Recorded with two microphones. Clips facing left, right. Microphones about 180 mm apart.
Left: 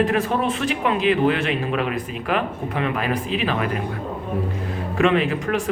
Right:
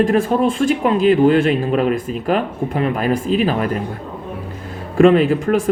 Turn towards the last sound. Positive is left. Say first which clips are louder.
# right 7 dB
turn(degrees=-35)  # may be behind; listen again after turning